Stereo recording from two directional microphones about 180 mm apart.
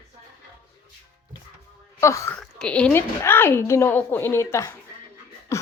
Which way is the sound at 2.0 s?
15° left (ahead or behind).